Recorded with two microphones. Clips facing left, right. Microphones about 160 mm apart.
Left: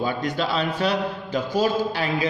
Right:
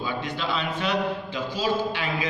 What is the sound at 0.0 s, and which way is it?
A man's voice, 40° left (ahead or behind).